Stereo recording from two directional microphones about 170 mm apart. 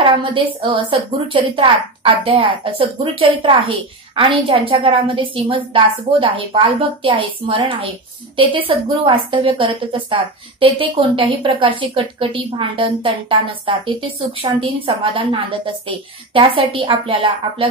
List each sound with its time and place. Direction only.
0.0 s a woman's voice: 30° right (ahead or behind)